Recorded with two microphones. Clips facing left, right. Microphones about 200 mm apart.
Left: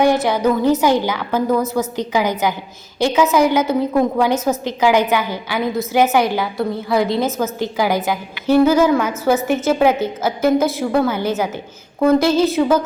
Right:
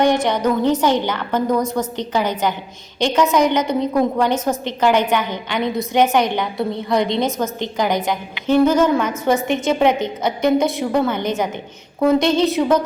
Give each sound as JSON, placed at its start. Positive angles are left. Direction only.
{"t": 0.0, "sound": "a woman's voice", "side_deg": 5}